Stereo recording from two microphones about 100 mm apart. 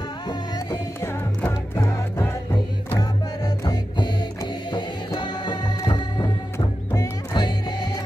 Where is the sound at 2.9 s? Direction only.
45° left (ahead or behind).